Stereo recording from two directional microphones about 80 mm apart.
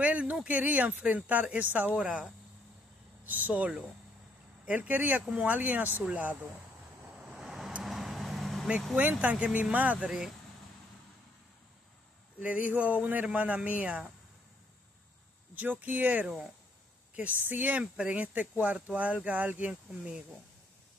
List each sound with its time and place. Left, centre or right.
0.0 s speech: centre
7.2 s vehicle: centre
9.2 s speech: centre
12.4 s speech: centre
15.5 s speech: centre